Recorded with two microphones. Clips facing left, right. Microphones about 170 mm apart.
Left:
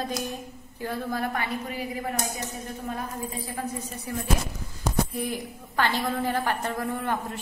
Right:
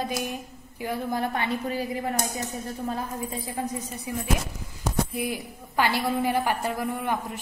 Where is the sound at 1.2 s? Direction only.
25° right (ahead or behind).